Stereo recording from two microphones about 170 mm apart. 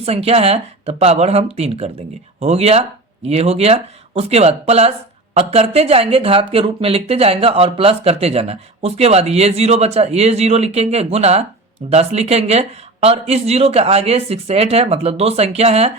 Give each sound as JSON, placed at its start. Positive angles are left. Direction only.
{"t": 0.0, "sound": "speech", "side_deg": -35}